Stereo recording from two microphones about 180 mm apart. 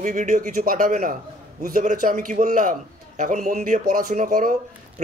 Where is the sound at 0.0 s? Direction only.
45° right (ahead or behind).